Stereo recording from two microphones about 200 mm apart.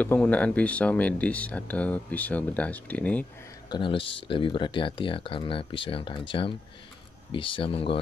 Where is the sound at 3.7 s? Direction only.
25° left (ahead or behind).